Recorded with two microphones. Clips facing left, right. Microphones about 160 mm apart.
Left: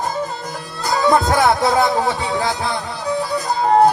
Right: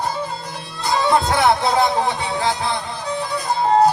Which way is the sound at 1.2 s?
20° right (ahead or behind).